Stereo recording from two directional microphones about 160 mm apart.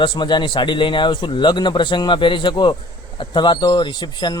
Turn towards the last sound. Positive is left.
turn(degrees=30)  # may be behind; listen again after turning